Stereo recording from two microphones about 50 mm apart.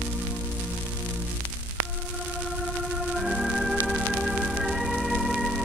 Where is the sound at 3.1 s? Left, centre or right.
Centre.